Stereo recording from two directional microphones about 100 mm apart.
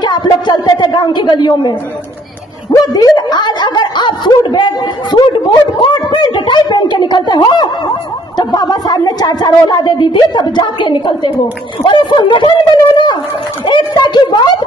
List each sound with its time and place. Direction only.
0.0 s speech: 50° left (ahead or behind)